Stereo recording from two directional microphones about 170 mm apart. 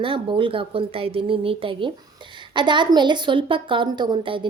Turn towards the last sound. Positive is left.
turn(degrees=-30)  # may be behind; listen again after turning